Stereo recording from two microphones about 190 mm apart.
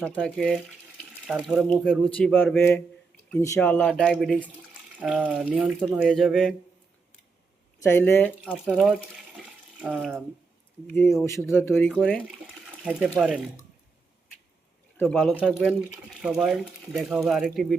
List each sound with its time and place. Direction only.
0.0 s speech: 5° left (ahead or behind)
7.8 s speech: 10° left (ahead or behind)
8.4 s speech: 5° right (ahead or behind)
10.8 s speech: 10° left (ahead or behind)
14.9 s speech: 5° left (ahead or behind)